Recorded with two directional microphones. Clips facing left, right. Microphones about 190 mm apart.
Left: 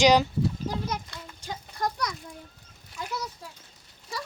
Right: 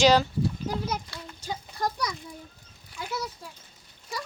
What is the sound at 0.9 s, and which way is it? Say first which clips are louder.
A child's voice: right 1 dB; 5° right (ahead or behind).